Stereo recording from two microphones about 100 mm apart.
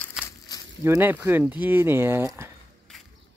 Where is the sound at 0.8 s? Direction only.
20° right (ahead or behind).